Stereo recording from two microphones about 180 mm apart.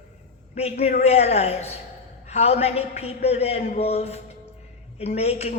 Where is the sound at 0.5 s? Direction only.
35° left (ahead or behind).